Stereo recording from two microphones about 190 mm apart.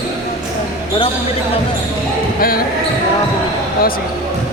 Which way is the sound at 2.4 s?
50° left (ahead or behind).